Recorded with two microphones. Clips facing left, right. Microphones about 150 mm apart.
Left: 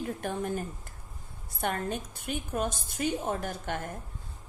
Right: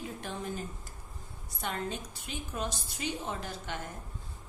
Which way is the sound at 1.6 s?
55° left (ahead or behind).